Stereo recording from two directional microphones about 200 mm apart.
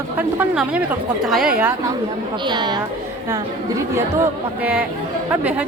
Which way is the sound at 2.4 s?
20° right (ahead or behind).